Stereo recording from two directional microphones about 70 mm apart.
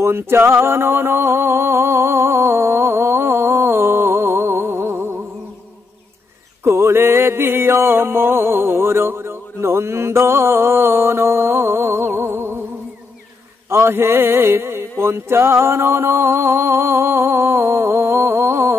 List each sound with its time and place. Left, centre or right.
0.0 s a sound: right
6.6 s music: right
13.7 s mantra: right